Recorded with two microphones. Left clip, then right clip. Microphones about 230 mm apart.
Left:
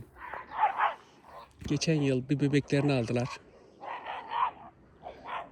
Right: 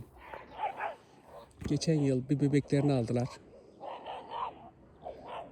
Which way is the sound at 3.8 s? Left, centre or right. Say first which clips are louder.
Left 3 dB; left.